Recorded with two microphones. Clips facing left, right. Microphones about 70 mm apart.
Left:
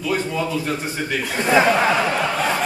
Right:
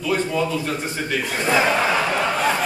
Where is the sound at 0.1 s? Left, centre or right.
Centre.